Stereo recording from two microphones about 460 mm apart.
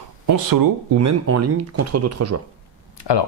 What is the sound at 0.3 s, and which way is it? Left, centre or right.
Speech, right.